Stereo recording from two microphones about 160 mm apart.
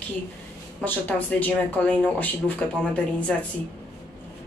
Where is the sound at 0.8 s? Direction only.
10° left (ahead or behind).